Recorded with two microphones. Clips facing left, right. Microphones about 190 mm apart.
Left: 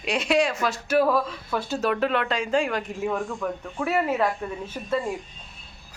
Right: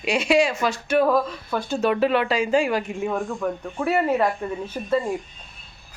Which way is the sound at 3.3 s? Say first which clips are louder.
Right 3 dB; 10° right (ahead or behind).